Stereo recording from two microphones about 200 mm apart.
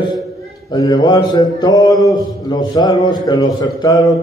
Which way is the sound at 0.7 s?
20° left (ahead or behind).